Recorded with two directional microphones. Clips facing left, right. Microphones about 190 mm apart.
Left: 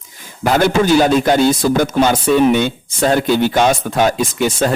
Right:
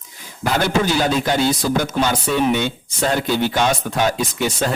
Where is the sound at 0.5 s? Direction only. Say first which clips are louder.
Left 6 dB; 50° left (ahead or behind).